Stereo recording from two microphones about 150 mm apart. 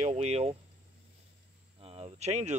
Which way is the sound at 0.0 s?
45° right (ahead or behind).